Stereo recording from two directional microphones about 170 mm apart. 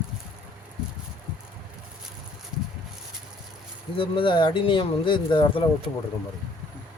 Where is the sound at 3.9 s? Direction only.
30° left (ahead or behind).